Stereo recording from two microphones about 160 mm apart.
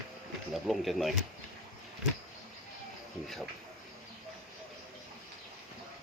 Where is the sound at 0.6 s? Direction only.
Centre (ahead or behind).